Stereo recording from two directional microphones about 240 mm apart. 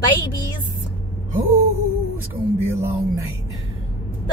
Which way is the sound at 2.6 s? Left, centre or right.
Centre.